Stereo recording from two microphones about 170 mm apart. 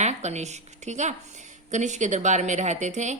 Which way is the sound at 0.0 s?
40° right (ahead or behind).